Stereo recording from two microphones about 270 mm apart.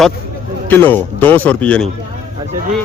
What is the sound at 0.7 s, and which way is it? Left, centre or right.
A man's voice, centre.